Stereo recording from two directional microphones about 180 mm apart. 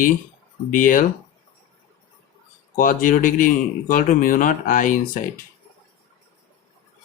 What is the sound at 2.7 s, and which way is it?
Speech, 50° left (ahead or behind).